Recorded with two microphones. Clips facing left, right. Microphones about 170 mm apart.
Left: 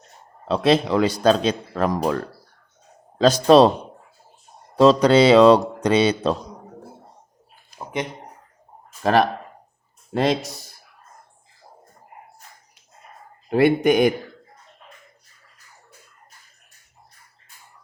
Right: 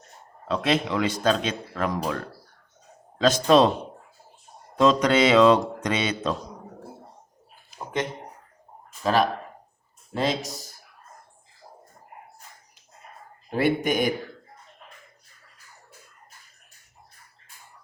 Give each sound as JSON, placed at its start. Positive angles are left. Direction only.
{"t": 0.4, "sound": "a man's voice", "side_deg": 30}
{"t": 3.2, "sound": "a man's voice", "side_deg": 35}
{"t": 4.8, "sound": "a man's voice", "side_deg": 35}
{"t": 10.2, "sound": "speech", "side_deg": 60}
{"t": 13.5, "sound": "speech", "side_deg": 65}